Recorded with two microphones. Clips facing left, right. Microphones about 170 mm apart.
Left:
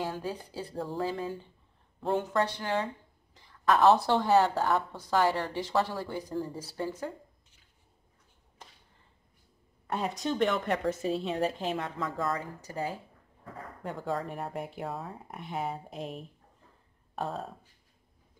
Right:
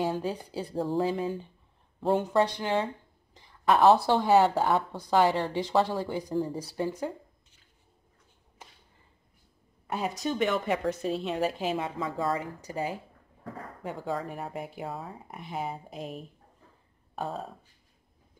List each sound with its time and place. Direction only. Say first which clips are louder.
0.0 s speech: right 5 dB; 20° right (ahead or behind)
8.6 s a sound: right 1 dB; 5° right (ahead or behind)
9.8 s speech: right 1 dB; 5° right (ahead or behind)
12.4 s speech: right 2 dB; 15° right (ahead or behind)
13.8 s speech: even; centre (ahead or behind)